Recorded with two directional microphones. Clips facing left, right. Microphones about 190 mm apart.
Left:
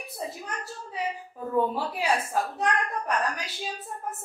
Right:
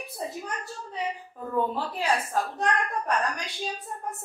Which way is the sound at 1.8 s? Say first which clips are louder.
Even; 10° left (ahead or behind).